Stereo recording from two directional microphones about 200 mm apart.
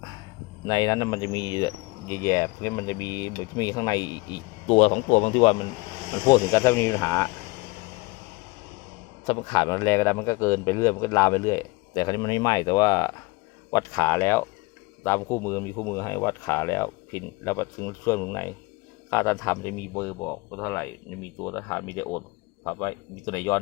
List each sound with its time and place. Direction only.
0.6 s speech: 20° left (ahead or behind)
4.7 s speech: 35° left (ahead or behind)
6.2 s a man's voice: 20° left (ahead or behind)
9.2 s a man's voice: 25° left (ahead or behind)